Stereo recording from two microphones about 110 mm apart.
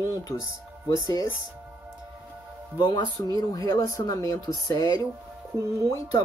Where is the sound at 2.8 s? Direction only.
40° left (ahead or behind).